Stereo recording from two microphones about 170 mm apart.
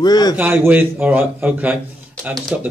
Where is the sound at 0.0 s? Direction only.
25° left (ahead or behind).